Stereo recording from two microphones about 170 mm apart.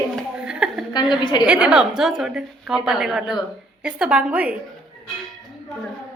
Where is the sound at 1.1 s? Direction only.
25° left (ahead or behind).